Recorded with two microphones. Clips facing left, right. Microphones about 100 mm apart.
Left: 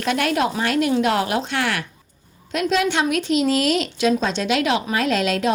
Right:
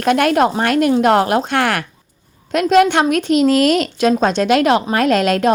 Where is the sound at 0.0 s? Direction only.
50° right (ahead or behind).